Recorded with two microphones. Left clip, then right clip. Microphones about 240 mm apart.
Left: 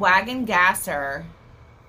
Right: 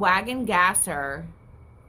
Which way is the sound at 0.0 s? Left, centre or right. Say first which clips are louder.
Left 3 dB; right.